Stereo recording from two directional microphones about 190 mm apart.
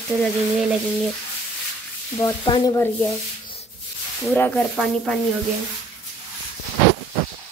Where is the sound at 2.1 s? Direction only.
20° left (ahead or behind).